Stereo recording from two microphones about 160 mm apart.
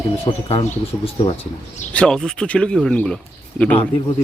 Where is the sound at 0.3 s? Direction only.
35° left (ahead or behind).